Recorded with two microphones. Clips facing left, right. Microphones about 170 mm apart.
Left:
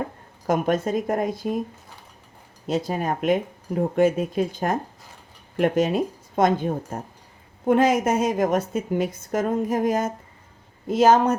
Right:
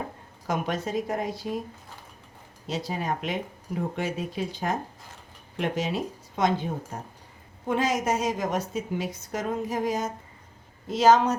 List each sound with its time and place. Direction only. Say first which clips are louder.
0.4 s a woman's voice: left 7 dB; 50° left (ahead or behind)
2.6 s a woman's voice: left 5 dB; 50° left (ahead or behind)